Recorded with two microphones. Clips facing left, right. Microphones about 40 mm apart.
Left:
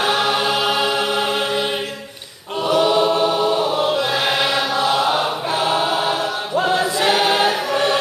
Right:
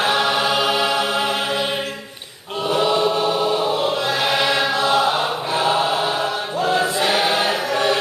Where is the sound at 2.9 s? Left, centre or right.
Centre.